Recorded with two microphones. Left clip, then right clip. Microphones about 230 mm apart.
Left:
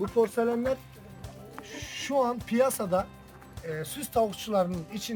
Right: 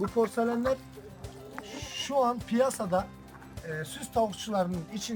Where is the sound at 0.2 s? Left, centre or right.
Centre.